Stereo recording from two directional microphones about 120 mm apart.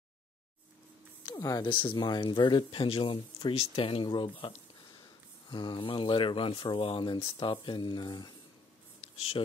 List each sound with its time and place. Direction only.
1.2 s a sound: 30° left (ahead or behind)
1.7 s speech: 45° left (ahead or behind)
9.1 s speech: 55° left (ahead or behind)